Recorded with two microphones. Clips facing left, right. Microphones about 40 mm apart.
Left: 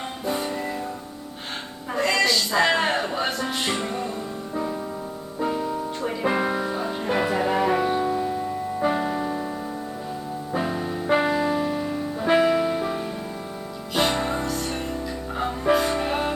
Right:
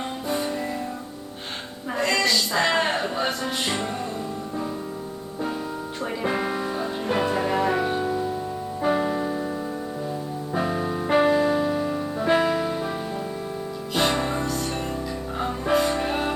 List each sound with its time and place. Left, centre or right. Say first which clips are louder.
0.0 s music: even; centre
1.9 s music: left 1 dB; centre
6.2 s music: left 3 dB; centre
10.5 s music: right 1 dB; centre